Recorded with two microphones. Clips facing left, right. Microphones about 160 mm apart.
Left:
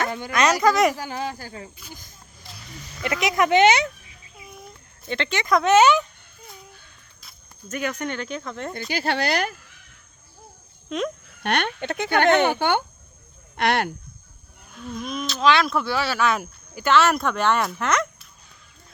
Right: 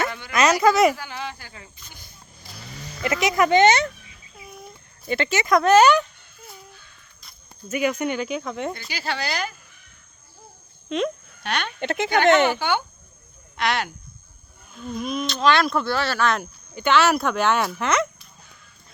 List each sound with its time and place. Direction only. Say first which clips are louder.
0.3 s speech: right 2 dB; 5° right (ahead or behind)
0.9 s speech: left 4 dB; 40° left (ahead or behind)
3.0 s speech: right 1 dB; centre (ahead or behind)
5.0 s speech: right 2 dB; 5° right (ahead or behind)
7.7 s speech: right 4 dB; 10° right (ahead or behind)
8.9 s speech: left 5 dB; 55° left (ahead or behind)
10.8 s speech: right 2 dB; centre (ahead or behind)
11.4 s speech: left 2 dB; 55° left (ahead or behind)
14.8 s speech: right 3 dB; centre (ahead or behind)